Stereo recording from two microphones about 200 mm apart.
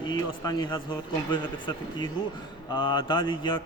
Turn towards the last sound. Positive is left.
turn(degrees=25)  # may be behind; listen again after turning